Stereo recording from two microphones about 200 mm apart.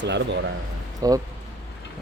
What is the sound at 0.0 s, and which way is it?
Speech, 60° right (ahead or behind).